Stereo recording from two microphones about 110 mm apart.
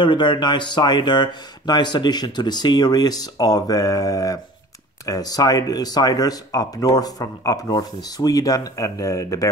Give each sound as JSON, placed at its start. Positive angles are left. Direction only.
{"t": 0.0, "sound": "speech", "side_deg": 45}